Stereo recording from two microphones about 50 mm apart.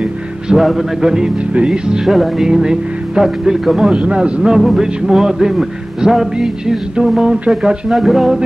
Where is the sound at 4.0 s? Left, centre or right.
Centre.